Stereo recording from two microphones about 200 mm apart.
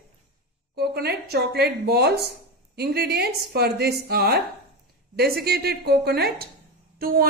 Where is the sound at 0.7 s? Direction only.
55° right (ahead or behind).